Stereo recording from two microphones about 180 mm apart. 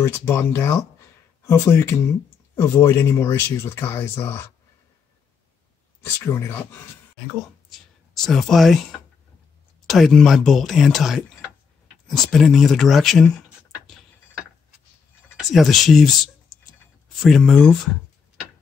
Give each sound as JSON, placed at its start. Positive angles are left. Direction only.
{"t": 0.0, "sound": "speech", "side_deg": 15}
{"t": 6.1, "sound": "speech", "side_deg": 15}
{"t": 7.2, "sound": "speech", "side_deg": 0}
{"t": 9.8, "sound": "speech", "side_deg": 0}
{"t": 15.3, "sound": "speech", "side_deg": 0}